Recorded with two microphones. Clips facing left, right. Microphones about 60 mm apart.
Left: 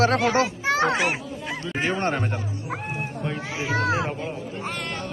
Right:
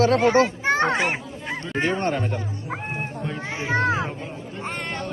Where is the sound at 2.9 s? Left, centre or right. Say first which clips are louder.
Right 1 dB; right.